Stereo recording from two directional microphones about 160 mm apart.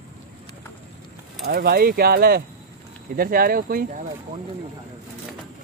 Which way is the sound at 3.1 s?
65° right (ahead or behind).